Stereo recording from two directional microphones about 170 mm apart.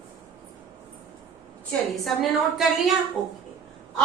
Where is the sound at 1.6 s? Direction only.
Centre (ahead or behind).